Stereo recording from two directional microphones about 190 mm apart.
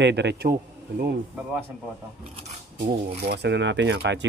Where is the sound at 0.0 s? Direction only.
65° right (ahead or behind).